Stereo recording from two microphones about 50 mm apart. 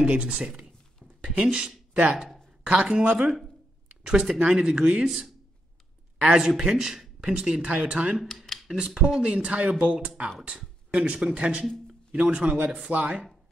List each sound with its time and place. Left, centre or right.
0.0 s speech: right
0.3 s speech: centre
2.0 s speech: centre
2.6 s speech: centre
5.0 s speech: centre; by 11.6 s right
11.6 s a sound: centre
12.1 s speech: right